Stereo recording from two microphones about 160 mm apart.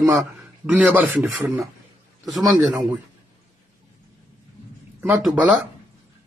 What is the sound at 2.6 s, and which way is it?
Speech, 5° right (ahead or behind).